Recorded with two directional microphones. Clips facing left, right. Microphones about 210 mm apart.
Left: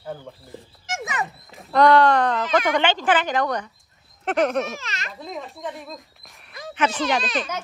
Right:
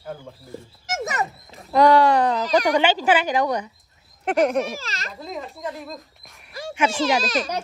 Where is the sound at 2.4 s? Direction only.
40° right (ahead or behind).